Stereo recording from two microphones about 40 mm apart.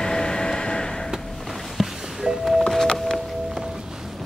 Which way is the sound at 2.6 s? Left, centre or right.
Centre.